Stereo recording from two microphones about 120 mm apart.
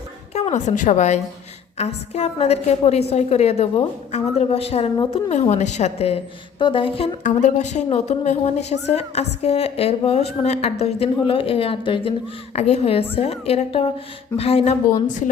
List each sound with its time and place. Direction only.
0.5 s a woman's voice: 90° left
1.8 s a woman's voice: 65° left (ahead or behind)
5.3 s a woman's voice: 75° left (ahead or behind)
6.6 s a sound: 45° left (ahead or behind)
7.3 s a woman's voice: 90° left
7.9 s a woman's voice: 65° left (ahead or behind); by 12.1 s 45° left (ahead or behind)
12.5 s a woman's voice: 60° left (ahead or behind)
15.0 s a woman's voice: 90° left